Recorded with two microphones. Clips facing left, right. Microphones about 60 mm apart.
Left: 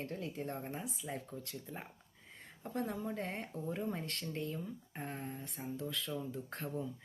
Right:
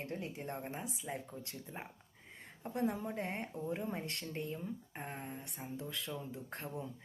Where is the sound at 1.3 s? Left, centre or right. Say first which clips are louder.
Left 2 dB; centre.